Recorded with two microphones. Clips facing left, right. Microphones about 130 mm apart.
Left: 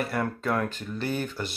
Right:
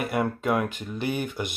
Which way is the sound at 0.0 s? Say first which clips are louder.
Right 2 dB; 15° right (ahead or behind).